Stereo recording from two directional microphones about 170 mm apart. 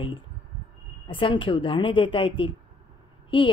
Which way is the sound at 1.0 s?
30° left (ahead or behind).